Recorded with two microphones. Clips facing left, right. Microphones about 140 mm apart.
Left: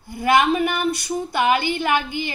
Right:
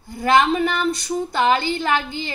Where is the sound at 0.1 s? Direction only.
15° left (ahead or behind).